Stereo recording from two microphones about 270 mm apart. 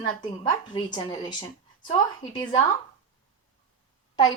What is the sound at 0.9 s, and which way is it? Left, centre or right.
Speech, centre.